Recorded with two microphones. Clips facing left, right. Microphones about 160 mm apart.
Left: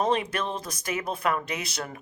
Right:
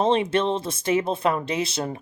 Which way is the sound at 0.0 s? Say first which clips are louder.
Right 5 dB; 25° right (ahead or behind).